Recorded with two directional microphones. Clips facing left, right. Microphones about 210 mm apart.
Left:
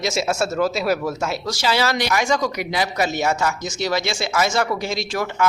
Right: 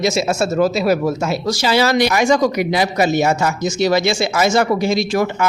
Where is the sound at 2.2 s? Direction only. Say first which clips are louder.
Right 7 dB; 15° right (ahead or behind).